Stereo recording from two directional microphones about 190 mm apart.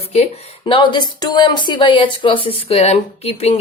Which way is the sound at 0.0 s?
35° left (ahead or behind).